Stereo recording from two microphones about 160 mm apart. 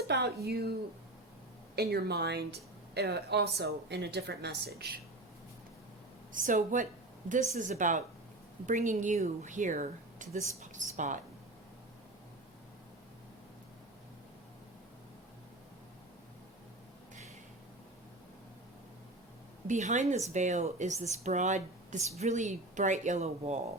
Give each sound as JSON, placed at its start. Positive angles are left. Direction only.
{"t": 0.4, "sound": "a woman's voice", "side_deg": -80}
{"t": 6.3, "sound": "speech", "side_deg": -55}
{"t": 19.6, "sound": "speech", "side_deg": -50}